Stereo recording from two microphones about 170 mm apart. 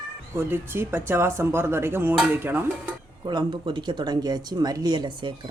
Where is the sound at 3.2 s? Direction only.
25° right (ahead or behind).